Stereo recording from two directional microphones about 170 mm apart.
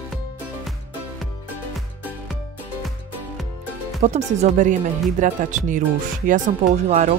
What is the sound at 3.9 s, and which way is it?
Speech, 40° right (ahead or behind).